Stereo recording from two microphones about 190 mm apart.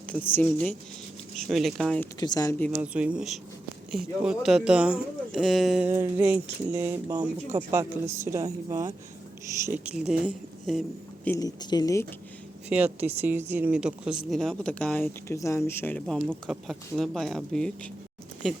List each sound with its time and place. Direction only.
0.1 s a woman's voice: 10° left (ahead or behind)
2.1 s speech: 20° left (ahead or behind)
2.7 s a woman's voice: 5° right (ahead or behind)
5.9 s a woman's voice: 15° right (ahead or behind)
11.3 s speech: 20° left (ahead or behind)
12.6 s a woman's voice: 10° right (ahead or behind)